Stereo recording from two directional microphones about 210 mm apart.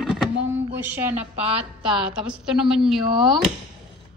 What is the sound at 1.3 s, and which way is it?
Speech, 30° right (ahead or behind).